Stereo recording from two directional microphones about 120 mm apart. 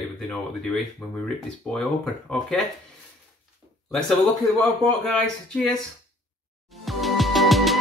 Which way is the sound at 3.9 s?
5° left (ahead or behind).